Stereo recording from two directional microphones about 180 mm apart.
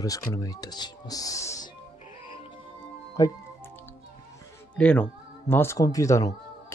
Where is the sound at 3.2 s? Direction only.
15° left (ahead or behind).